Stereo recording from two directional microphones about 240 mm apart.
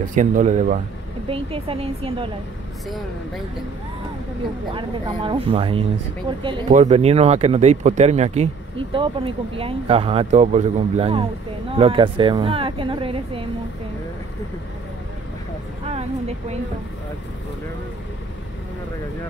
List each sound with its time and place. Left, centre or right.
0.0 s speech: right
4.7 s speech: right
15.8 s speech: right